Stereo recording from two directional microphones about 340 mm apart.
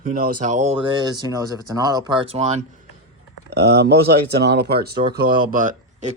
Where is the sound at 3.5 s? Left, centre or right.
Right.